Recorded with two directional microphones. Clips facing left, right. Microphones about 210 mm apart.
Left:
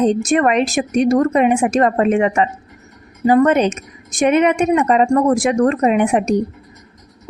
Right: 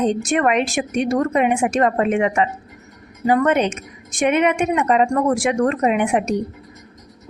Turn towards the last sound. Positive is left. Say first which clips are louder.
# left 3 dB
turn(degrees=40)  # may be behind; listen again after turning